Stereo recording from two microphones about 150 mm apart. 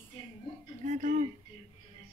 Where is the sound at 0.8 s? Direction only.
50° right (ahead or behind).